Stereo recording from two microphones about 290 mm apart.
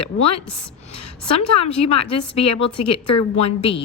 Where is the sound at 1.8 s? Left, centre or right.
Left.